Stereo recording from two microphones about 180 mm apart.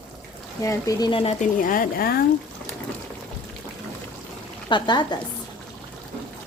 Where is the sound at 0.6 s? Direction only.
20° left (ahead or behind).